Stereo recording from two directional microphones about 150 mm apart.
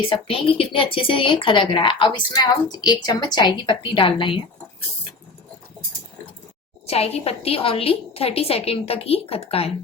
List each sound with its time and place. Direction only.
0.1 s a woman's voice: 35° left (ahead or behind)
6.8 s a woman's voice: 45° left (ahead or behind)